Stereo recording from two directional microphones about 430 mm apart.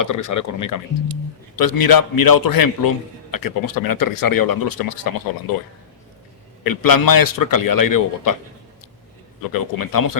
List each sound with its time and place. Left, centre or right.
0.0 s speech: left
6.7 s speech: left
9.5 s speech: left